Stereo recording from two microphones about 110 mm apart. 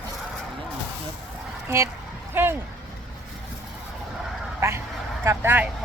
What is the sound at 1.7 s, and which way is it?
Speech, 25° right (ahead or behind).